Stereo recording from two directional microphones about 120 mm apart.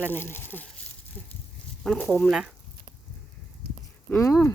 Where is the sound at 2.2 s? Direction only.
5° right (ahead or behind).